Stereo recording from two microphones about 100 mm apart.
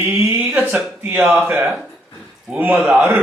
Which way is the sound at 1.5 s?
20° right (ahead or behind).